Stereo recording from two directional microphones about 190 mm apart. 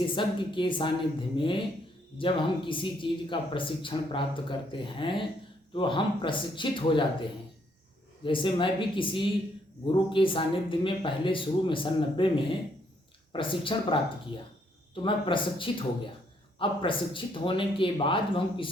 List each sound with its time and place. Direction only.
0.0 s speech: 25° left (ahead or behind)
13.3 s speech: 25° left (ahead or behind)